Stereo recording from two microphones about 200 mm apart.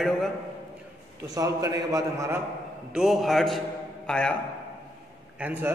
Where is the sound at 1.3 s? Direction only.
15° right (ahead or behind).